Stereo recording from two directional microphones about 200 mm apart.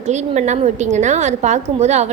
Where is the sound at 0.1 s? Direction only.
35° right (ahead or behind).